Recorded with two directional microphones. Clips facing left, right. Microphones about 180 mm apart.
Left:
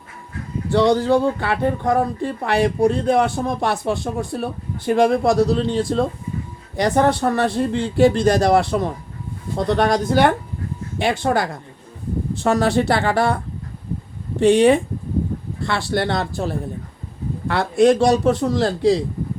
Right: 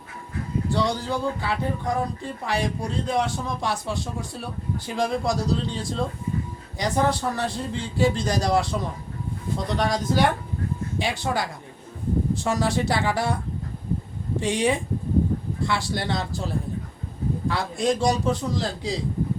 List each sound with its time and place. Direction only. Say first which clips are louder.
0.7 s speech: left 11 dB; 65° left (ahead or behind)